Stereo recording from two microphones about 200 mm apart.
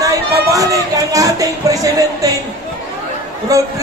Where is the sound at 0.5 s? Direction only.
15° right (ahead or behind).